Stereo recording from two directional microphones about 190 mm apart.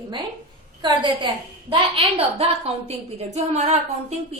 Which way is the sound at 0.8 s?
25° right (ahead or behind).